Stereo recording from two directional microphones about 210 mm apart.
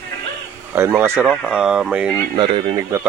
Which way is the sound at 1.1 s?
5° left (ahead or behind).